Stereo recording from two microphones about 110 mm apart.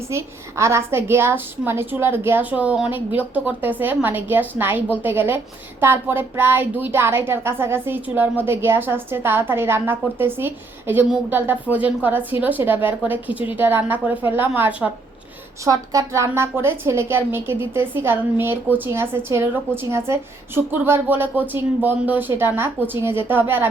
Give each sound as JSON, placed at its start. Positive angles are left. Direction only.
{"t": 0.1, "sound": "a woman's voice", "side_deg": -25}
{"t": 15.6, "sound": "a woman's voice", "side_deg": -30}